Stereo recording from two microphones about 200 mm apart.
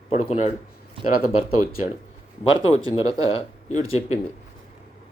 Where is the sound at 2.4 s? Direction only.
30° left (ahead or behind).